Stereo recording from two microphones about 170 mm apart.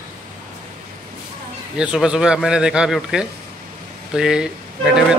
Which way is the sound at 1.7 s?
5° right (ahead or behind).